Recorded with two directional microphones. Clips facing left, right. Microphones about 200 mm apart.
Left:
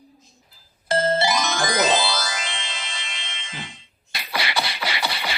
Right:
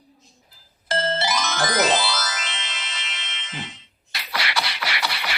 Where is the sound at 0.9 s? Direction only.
15° left (ahead or behind).